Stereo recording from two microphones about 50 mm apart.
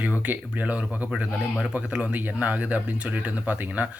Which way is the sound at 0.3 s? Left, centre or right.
Right.